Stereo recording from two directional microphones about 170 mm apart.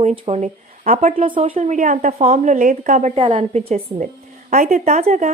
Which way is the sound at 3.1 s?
35° right (ahead or behind).